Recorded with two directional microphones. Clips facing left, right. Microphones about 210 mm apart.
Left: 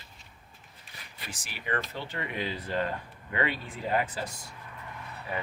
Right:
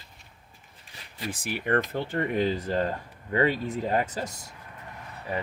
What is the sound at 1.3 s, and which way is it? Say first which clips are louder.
Speech: right 8 dB; 55° right (ahead or behind).